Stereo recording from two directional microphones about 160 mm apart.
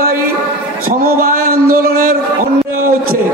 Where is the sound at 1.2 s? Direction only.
60° right (ahead or behind).